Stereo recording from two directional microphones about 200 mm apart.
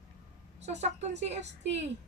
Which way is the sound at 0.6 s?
35° right (ahead or behind).